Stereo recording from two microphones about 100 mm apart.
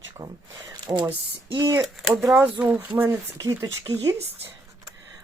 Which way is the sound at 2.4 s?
20° right (ahead or behind).